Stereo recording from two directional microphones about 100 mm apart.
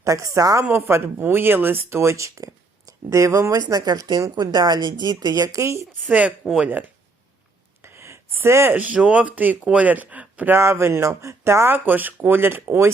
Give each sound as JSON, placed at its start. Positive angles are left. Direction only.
{"t": 0.0, "sound": "speech", "side_deg": -30}
{"t": 0.6, "sound": "speech", "side_deg": -20}
{"t": 6.0, "sound": "speech", "side_deg": -10}
{"t": 7.8, "sound": "speech", "side_deg": -25}